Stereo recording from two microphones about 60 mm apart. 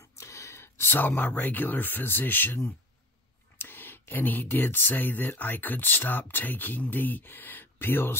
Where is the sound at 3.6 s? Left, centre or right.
Left.